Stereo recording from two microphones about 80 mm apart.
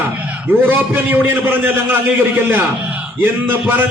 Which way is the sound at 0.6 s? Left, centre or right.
Right.